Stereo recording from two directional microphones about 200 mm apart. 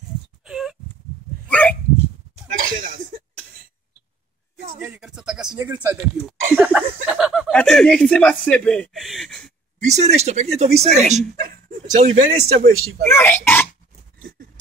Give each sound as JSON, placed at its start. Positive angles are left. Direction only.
{"t": 0.5, "sound": "a sound", "side_deg": 0}
{"t": 1.5, "sound": "dog", "side_deg": 10}
{"t": 2.6, "sound": "a sound", "side_deg": -45}
{"t": 4.7, "sound": "speech", "side_deg": -10}
{"t": 9.8, "sound": "speech", "side_deg": -35}
{"t": 13.1, "sound": "speech", "side_deg": 10}